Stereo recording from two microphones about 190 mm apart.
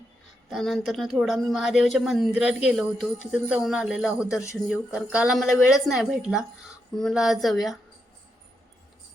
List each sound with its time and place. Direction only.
0.5 s speech: centre (ahead or behind)